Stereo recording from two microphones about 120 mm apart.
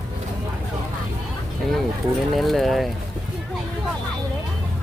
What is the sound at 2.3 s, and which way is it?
Speech, centre (ahead or behind).